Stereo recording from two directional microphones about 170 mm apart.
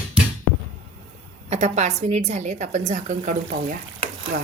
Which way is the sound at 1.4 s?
40° right (ahead or behind).